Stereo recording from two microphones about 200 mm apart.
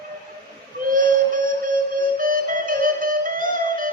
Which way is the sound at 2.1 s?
45° right (ahead or behind).